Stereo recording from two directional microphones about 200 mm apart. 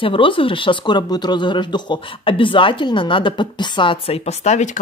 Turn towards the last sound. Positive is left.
turn(degrees=35)  # may be behind; listen again after turning